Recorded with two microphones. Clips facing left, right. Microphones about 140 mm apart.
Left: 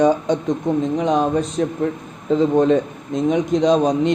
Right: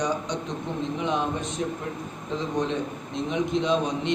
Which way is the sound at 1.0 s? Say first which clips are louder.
Left 9 dB; 40° left (ahead or behind).